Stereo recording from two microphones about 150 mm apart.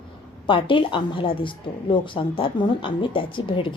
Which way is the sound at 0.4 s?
35° left (ahead or behind).